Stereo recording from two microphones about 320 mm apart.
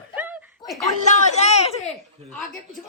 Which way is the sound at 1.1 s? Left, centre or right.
Left.